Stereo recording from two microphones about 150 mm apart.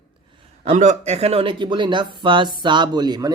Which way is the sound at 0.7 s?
50° right (ahead or behind).